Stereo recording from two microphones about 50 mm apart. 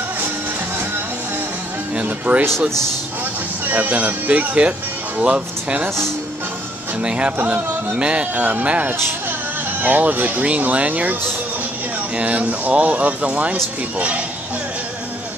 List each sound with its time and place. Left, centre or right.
2.0 s speech: right
3.6 s speech: right
7.0 s speech: right
12.2 s speech: right